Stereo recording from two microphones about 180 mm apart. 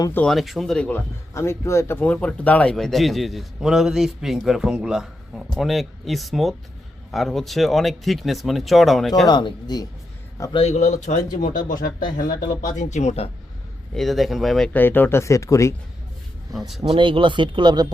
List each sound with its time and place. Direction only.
0.0 s a man's voice: 10° left (ahead or behind)
9.2 s speech: 25° left (ahead or behind)
13.9 s speech: centre (ahead or behind); by 15.7 s 15° left (ahead or behind)
16.5 s a man's voice: centre (ahead or behind)
16.9 s speech: 30° right (ahead or behind)